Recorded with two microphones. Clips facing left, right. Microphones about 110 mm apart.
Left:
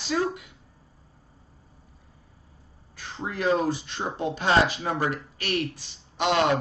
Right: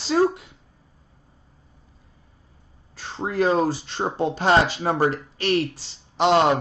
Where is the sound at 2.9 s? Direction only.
30° right (ahead or behind).